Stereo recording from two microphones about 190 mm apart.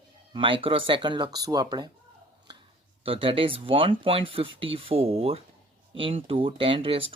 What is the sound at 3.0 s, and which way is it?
Speech, 30° right (ahead or behind).